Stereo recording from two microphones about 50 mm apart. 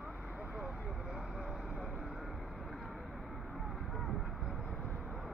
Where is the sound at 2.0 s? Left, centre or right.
Centre.